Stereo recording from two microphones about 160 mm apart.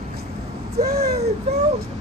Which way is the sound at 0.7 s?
80° right.